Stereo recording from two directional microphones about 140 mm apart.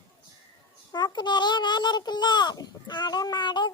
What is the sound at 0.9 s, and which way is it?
A child's voice, 30° left (ahead or behind).